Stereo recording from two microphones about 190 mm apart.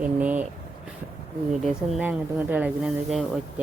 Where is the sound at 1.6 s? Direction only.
10° right (ahead or behind).